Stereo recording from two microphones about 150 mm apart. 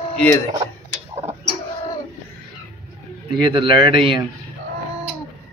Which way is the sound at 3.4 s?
35° right (ahead or behind).